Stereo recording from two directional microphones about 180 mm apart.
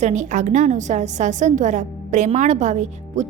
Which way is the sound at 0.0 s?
40° right (ahead or behind).